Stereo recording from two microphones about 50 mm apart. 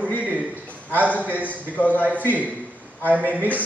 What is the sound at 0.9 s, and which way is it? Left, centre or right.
Speech, right.